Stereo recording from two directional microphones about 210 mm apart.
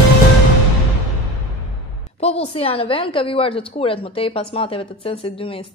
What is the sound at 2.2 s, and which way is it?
A woman's voice, 30° left (ahead or behind).